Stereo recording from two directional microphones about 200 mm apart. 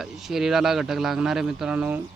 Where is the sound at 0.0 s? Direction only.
Centre (ahead or behind).